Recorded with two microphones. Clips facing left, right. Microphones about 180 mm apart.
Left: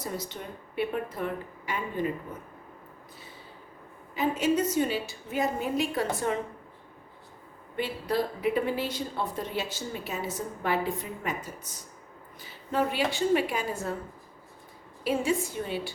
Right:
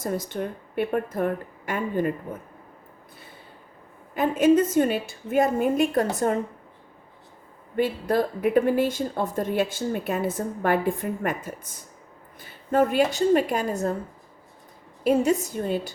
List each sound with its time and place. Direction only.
0.0 s a woman's voice: 50° right (ahead or behind)
4.1 s a woman's voice: 50° right (ahead or behind)
7.8 s a woman's voice: 50° right (ahead or behind)
15.0 s a woman's voice: 40° right (ahead or behind)